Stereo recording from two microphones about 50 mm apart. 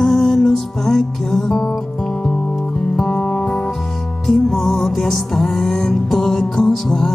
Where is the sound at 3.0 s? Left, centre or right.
Centre.